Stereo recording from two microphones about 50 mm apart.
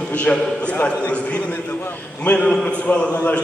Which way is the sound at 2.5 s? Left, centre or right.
Centre.